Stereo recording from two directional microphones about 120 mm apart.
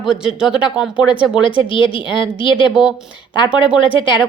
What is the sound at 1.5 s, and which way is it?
Speech, 45° left (ahead or behind).